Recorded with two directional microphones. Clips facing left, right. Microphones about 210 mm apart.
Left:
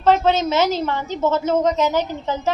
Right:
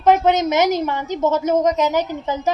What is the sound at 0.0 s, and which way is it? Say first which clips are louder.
A woman's voice: right 1 dB; 15° right (ahead or behind).